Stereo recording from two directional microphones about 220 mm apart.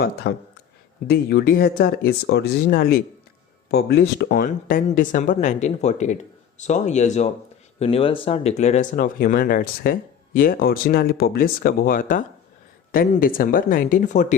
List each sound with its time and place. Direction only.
0.2 s speech: 55° left (ahead or behind); by 14.3 s 35° left (ahead or behind)